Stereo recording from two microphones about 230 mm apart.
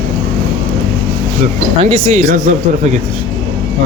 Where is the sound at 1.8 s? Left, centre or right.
Right.